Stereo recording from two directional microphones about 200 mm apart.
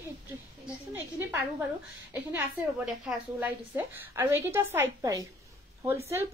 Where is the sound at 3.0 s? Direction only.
10° right (ahead or behind).